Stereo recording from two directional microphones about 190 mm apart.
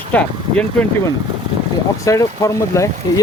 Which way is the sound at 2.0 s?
15° left (ahead or behind).